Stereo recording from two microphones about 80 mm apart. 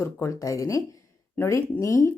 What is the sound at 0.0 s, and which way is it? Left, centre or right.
A woman's voice, left.